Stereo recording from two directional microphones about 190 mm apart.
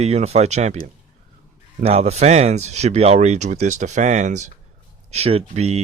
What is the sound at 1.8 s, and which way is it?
Speech, 35° right (ahead or behind).